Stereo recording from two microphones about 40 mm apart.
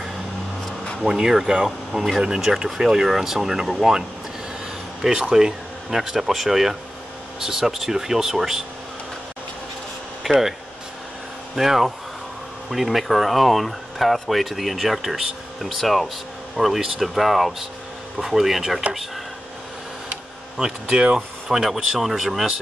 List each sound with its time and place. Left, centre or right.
1.0 s speech: centre
5.0 s speech: centre
10.2 s speech: centre
11.5 s speech: centre
20.5 s speech: centre